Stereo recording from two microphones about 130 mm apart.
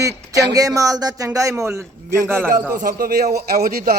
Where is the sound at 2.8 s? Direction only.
90° right.